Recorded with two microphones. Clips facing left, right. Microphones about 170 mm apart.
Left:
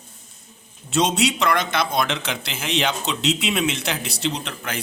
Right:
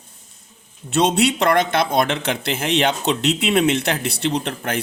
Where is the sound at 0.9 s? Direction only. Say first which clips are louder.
Right 3 dB; 60° right (ahead or behind).